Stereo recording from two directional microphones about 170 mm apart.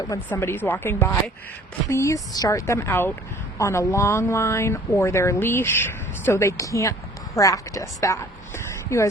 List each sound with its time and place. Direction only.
0.1 s a woman's voice: 15° left (ahead or behind)